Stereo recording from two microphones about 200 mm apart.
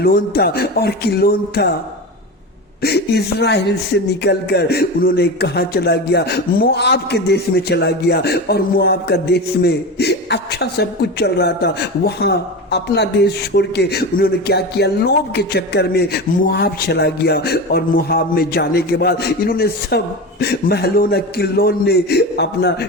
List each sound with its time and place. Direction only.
0.0 s a man's voice: 50° left (ahead or behind)
2.8 s a man's voice: 55° left (ahead or behind)